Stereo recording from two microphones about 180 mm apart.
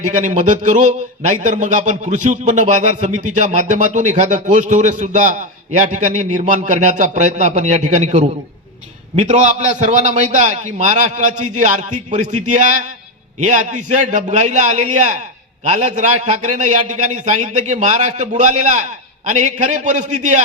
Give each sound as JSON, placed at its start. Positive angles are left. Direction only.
{"t": 0.0, "sound": "a man's voice", "side_deg": -45}